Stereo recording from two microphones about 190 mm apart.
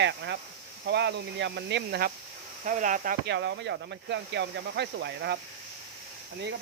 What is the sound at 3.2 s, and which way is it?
Speech, 65° right (ahead or behind).